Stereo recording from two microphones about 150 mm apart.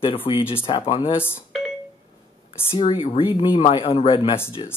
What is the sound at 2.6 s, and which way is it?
Speech, 35° left (ahead or behind).